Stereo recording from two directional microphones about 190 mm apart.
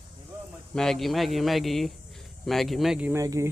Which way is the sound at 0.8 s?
Centre (ahead or behind).